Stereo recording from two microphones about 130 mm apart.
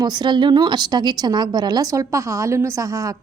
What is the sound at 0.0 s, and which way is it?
A woman's voice, 35° right (ahead or behind).